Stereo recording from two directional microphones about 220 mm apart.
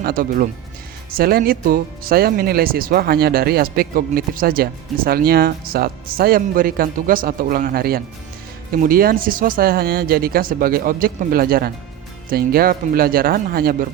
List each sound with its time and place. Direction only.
0.0 s speech: 40° right (ahead or behind)